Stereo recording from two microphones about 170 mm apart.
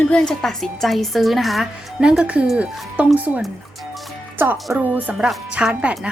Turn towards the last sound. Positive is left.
turn(degrees=-5)  # may be behind; listen again after turning